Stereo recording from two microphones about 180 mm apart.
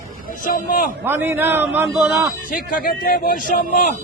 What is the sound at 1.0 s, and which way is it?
A man's voice, 10° right (ahead or behind).